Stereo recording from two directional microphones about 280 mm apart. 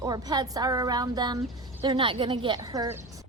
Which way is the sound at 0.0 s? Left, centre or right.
Centre.